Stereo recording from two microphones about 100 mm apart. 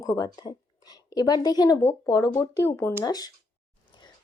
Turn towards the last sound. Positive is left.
turn(degrees=50)  # may be behind; listen again after turning